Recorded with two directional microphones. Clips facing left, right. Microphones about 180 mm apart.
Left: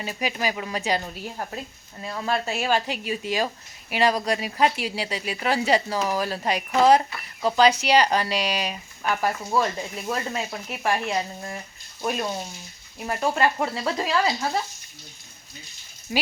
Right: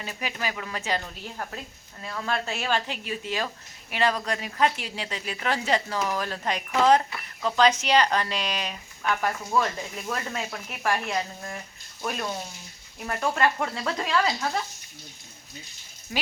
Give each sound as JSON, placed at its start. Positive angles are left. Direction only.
{"t": 0.0, "sound": "speech", "side_deg": 15}
{"t": 10.1, "sound": "speech", "side_deg": 20}
{"t": 16.1, "sound": "speech", "side_deg": 20}